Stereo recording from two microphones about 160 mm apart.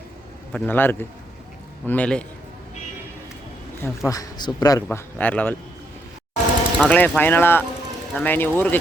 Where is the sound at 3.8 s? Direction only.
15° left (ahead or behind).